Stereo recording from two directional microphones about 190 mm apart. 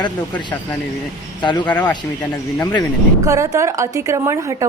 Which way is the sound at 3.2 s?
15° right (ahead or behind).